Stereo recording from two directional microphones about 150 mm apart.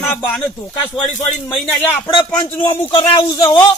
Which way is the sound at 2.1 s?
30° left (ahead or behind).